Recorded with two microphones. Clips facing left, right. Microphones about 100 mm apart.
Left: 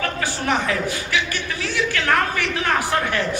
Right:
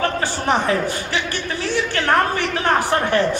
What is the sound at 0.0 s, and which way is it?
A man's voice, 35° right (ahead or behind).